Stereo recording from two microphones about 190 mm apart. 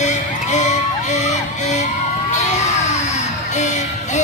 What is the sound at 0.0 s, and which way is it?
Music, 40° left (ahead or behind).